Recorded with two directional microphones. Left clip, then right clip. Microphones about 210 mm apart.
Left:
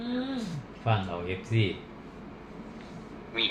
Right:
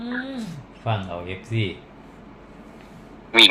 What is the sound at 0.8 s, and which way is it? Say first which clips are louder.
Speech: right 2 dB; 35° right (ahead or behind).